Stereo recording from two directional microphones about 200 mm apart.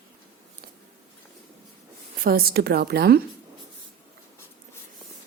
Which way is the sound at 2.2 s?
50° right (ahead or behind).